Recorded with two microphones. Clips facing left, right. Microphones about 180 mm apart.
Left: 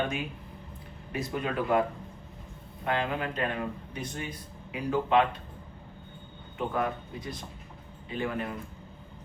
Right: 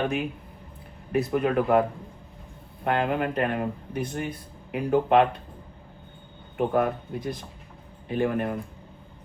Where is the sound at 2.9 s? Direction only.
55° right (ahead or behind).